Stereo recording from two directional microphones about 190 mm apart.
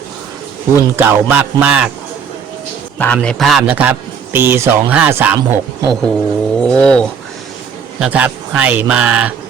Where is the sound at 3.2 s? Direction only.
Centre (ahead or behind); by 5.9 s 15° right (ahead or behind).